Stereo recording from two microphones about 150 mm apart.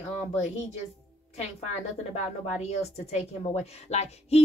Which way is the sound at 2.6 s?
45° left (ahead or behind).